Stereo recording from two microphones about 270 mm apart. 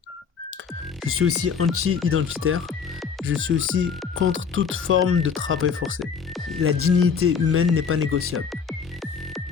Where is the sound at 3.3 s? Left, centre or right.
Right.